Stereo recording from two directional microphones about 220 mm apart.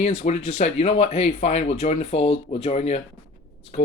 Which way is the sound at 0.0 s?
30° left (ahead or behind).